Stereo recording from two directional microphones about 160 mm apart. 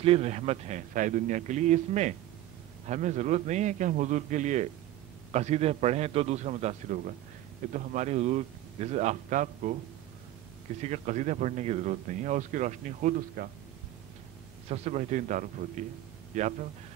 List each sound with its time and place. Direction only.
0.0 s speech: 40° right (ahead or behind)
10.8 s speech: 45° right (ahead or behind)
14.7 s speech: 45° right (ahead or behind)